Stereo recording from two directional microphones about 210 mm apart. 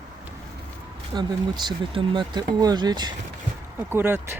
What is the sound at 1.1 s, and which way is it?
Speech, 20° right (ahead or behind).